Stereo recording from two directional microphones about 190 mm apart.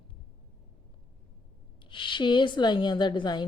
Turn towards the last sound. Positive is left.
turn(degrees=25)  # may be behind; listen again after turning